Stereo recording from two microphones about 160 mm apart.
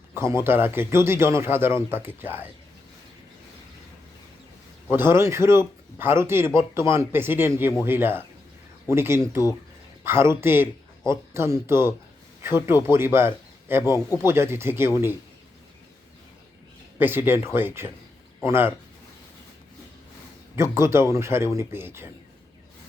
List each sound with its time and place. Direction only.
0.1 s speech: 15° right (ahead or behind)
4.9 s speech: 15° right (ahead or behind)
17.0 s speech: 15° right (ahead or behind)
20.6 s speech: 15° right (ahead or behind)